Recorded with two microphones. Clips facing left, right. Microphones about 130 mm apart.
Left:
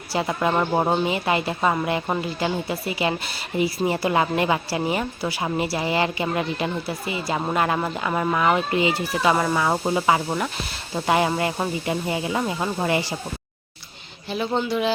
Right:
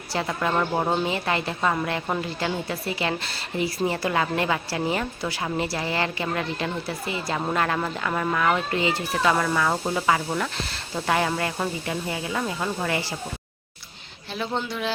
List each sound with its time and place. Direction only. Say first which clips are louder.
0.1 s a woman's voice: left 3 dB; 15° left (ahead or behind)
14.3 s speech: left 5 dB; 5° left (ahead or behind)